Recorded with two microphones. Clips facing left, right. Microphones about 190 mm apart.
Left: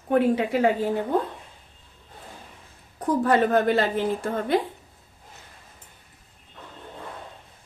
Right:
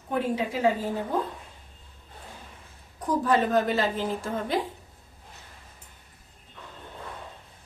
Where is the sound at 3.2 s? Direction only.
60° left (ahead or behind).